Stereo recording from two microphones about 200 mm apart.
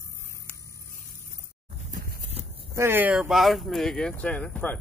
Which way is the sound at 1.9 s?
45° right (ahead or behind).